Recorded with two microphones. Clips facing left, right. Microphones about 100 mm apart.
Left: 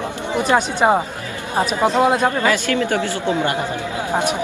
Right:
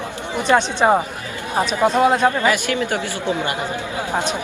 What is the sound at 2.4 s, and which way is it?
Speech, 15° right (ahead or behind).